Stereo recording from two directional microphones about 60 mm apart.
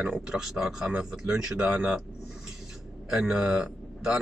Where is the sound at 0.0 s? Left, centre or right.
Right.